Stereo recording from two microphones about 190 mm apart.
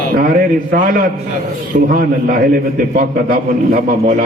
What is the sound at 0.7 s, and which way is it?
A man's voice, 45° right (ahead or behind).